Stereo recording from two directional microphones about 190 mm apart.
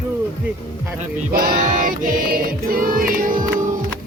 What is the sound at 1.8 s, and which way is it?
Music, 45° right (ahead or behind).